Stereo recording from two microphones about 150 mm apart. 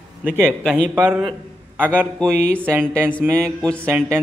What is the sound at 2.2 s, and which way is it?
Speech, 10° left (ahead or behind).